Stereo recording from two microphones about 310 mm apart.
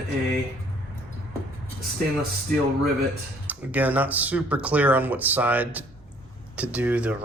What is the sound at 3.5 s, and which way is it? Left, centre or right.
Speech, centre.